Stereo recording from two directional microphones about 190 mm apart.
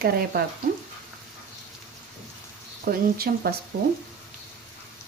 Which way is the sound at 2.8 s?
50° right (ahead or behind).